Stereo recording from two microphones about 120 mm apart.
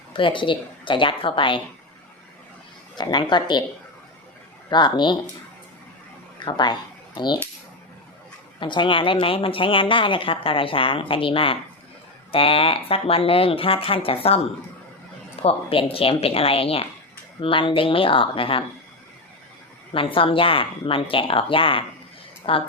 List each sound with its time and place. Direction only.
0.1 s speech: 45° left (ahead or behind)
2.9 s speech: 35° left (ahead or behind)
4.7 s speech: 40° left (ahead or behind)
6.4 s speech: 40° left (ahead or behind)
8.6 s speech: 40° left (ahead or behind)
19.9 s speech: 50° left (ahead or behind)